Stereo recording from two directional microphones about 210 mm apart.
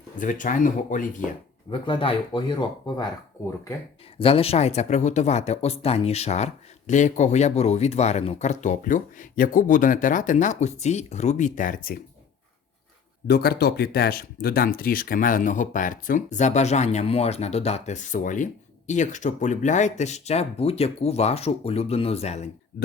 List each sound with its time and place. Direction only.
0.2 s speech: 40° left (ahead or behind)
1.7 s speech: 25° left (ahead or behind)
4.2 s speech: 25° left (ahead or behind)
13.2 s speech: 50° left (ahead or behind); by 22.4 s 30° left (ahead or behind)